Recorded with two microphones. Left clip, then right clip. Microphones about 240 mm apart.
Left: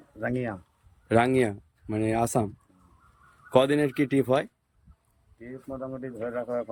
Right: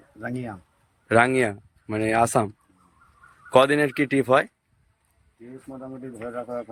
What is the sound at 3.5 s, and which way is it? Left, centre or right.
Speech, centre.